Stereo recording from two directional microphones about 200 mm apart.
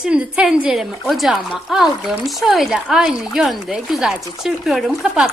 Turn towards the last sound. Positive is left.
turn(degrees=-5)  # may be behind; listen again after turning